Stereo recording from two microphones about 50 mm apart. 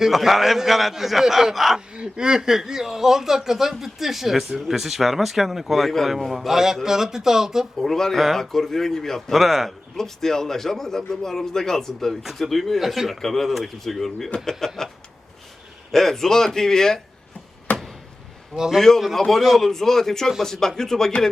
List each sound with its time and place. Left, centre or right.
0.0 s speech: centre
1.9 s speech: centre
7.8 s a man's voice: centre
15.9 s a man's voice: centre
17.7 s a sound: left
18.5 s speech: centre
18.9 s a man's voice: centre